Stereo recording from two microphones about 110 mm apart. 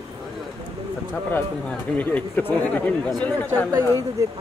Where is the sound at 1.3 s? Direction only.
15° left (ahead or behind).